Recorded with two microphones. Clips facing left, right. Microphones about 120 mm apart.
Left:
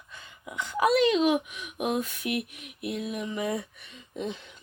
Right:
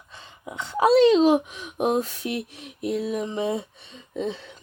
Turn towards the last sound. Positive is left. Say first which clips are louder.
# right 5 dB
turn(degrees=-35)  # may be behind; listen again after turning